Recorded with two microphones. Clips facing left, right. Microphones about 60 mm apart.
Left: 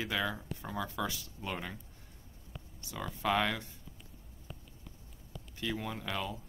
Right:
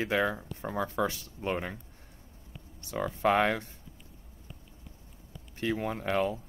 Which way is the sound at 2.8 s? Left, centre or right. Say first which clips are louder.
Right 8 dB; right.